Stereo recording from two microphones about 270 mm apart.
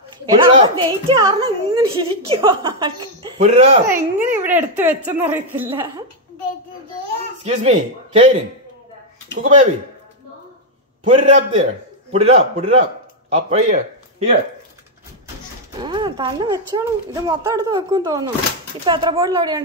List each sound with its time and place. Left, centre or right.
0.3 s speech: centre
3.9 s speech: centre
7.4 s speech: right
9.4 s speech: right
11.1 s speech: right
15.8 s speech: centre